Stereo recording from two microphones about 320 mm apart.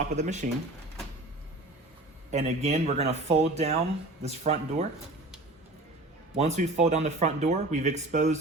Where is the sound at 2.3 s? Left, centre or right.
Right.